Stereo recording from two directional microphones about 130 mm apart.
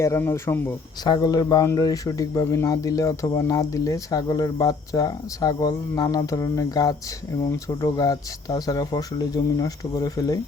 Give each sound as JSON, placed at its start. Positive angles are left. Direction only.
{"t": 0.0, "sound": "speech", "side_deg": 20}
{"t": 1.0, "sound": "speech", "side_deg": 30}